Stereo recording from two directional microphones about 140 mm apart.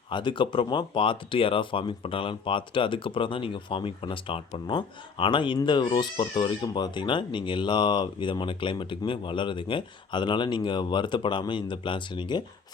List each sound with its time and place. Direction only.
0.1 s speech: 35° left (ahead or behind)